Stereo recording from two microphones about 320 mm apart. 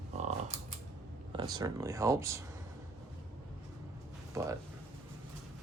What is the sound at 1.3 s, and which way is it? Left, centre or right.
Speech, centre.